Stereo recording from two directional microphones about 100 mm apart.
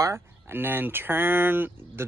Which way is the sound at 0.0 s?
25° right (ahead or behind).